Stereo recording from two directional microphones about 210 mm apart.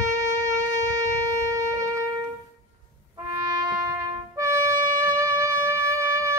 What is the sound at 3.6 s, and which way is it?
Trumpet, 15° right (ahead or behind).